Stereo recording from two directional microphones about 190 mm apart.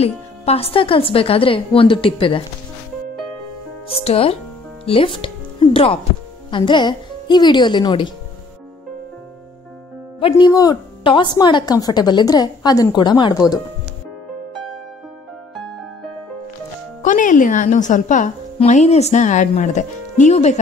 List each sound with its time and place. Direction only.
0.0 s a woman's voice: 30° left (ahead or behind)
3.9 s a woman's voice: 30° left (ahead or behind)
10.3 s a woman's voice: 20° left (ahead or behind)
17.0 s a woman's voice: 45° left (ahead or behind)